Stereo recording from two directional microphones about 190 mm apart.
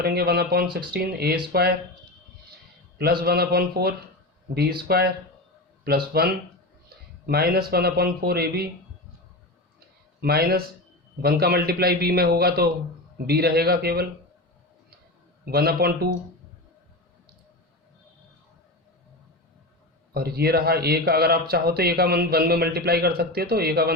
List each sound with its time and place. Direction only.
0.0 s a man's voice: 55° right (ahead or behind)
3.0 s a man's voice: 55° right (ahead or behind)
10.2 s a man's voice: 55° right (ahead or behind)
15.4 s a man's voice: 55° right (ahead or behind)
20.1 s a man's voice: 55° right (ahead or behind)